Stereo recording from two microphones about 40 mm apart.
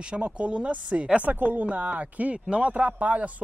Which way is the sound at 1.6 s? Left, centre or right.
Right.